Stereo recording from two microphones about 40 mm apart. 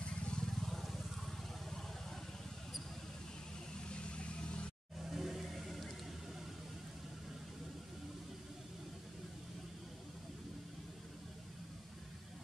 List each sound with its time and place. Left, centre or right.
0.0 s vehicle: left
0.6 s vehicle: centre
3.9 s vehicle: left
5.1 s vehicle: centre